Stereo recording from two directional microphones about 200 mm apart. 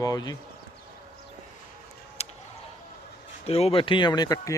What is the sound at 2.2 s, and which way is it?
Tick, 30° left (ahead or behind).